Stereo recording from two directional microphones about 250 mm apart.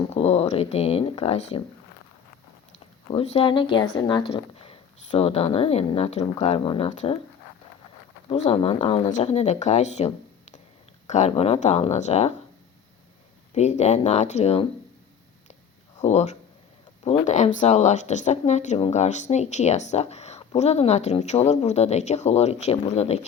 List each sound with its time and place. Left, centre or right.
0.1 s speech: left
3.1 s speech: left
8.3 s speech: left
11.1 s speech: left
13.5 s speech: left
16.0 s speech: left